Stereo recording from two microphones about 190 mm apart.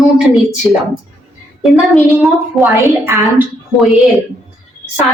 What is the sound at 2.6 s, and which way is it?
Speech, 15° right (ahead or behind).